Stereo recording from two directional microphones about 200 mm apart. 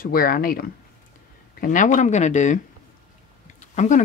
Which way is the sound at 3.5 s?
35° left (ahead or behind).